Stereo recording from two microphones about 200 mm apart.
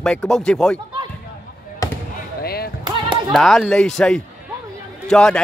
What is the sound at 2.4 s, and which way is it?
Basketball bounce, 50° left (ahead or behind).